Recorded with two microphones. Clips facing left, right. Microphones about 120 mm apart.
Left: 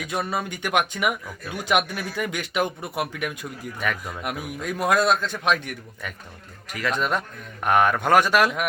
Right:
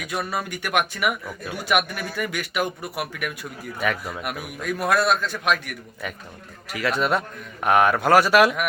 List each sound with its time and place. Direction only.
0.0 s speech: 25° left (ahead or behind)
3.8 s a man's voice: 5° right (ahead or behind)
4.2 s speech: 20° left (ahead or behind)
6.7 s a man's voice: 10° right (ahead or behind)